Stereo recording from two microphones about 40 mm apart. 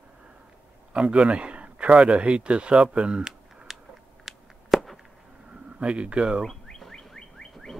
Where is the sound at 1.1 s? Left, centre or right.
Right.